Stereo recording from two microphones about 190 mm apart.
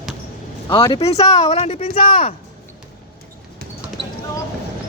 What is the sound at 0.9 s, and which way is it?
Speech, 35° left (ahead or behind).